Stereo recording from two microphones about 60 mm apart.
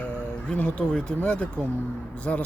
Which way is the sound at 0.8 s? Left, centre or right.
Centre.